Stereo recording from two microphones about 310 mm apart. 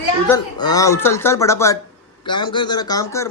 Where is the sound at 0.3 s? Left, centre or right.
Centre.